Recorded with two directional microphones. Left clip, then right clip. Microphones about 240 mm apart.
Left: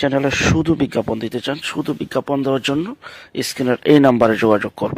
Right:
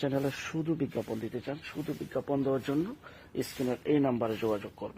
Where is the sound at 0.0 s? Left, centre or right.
Left.